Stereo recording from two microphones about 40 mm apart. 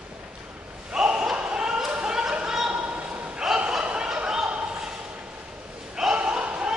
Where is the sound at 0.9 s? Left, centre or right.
Centre.